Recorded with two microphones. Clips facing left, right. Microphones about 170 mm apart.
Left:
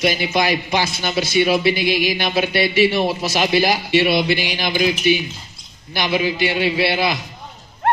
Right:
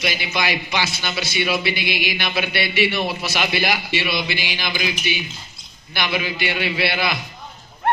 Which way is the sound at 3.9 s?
55° left (ahead or behind).